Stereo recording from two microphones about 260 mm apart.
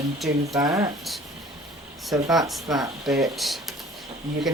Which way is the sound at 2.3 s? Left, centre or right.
Centre.